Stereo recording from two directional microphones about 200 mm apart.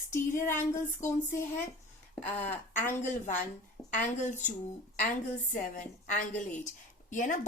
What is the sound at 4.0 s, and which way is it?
Speech, 40° left (ahead or behind).